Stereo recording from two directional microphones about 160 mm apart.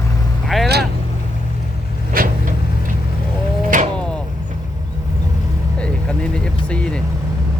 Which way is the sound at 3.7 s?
55° right (ahead or behind).